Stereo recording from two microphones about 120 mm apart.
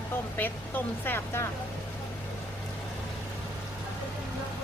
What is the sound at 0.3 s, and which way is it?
Speech, 15° left (ahead or behind).